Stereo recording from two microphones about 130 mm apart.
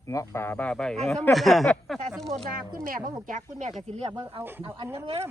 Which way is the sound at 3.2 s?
90° right.